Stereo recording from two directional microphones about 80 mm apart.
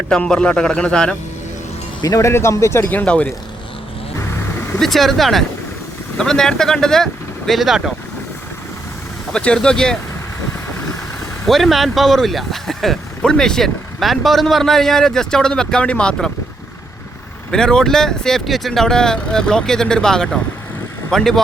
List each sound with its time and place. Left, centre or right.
0.1 s speech: centre
2.0 s speech: left
2.3 s speech: left; by 3.2 s centre
4.8 s speech: centre
9.3 s speech: centre
11.4 s speech: centre
17.5 s speech: centre